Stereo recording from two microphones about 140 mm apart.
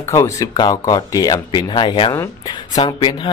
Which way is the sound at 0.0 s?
25° left (ahead or behind).